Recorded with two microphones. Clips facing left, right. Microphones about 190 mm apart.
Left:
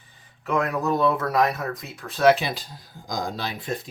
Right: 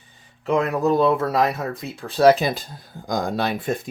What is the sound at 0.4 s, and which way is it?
Speech, 25° right (ahead or behind).